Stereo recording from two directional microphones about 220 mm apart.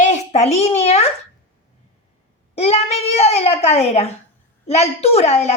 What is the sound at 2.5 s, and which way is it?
A woman's voice, 30° left (ahead or behind).